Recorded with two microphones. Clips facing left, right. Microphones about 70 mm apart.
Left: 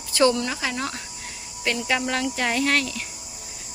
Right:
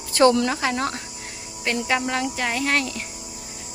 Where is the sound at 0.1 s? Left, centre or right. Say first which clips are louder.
Right 3 dB; right.